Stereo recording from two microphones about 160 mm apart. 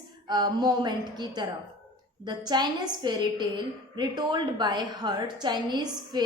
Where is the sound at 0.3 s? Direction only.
25° right (ahead or behind).